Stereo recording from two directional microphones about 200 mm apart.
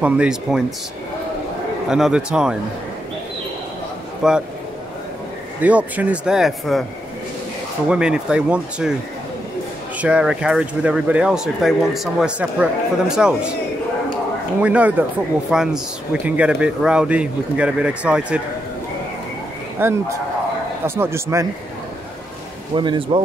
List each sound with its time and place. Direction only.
0.0 s speech: 5° right (ahead or behind)
1.9 s speech: centre (ahead or behind)
4.2 s speech: centre (ahead or behind)
5.6 s speech: 5° right (ahead or behind)
7.9 s speech: 5° right (ahead or behind)
9.9 s speech: 5° right (ahead or behind)
14.6 s a man's voice: 5° right (ahead or behind)
19.8 s a man's voice: 10° right (ahead or behind)
22.8 s speech: 25° right (ahead or behind)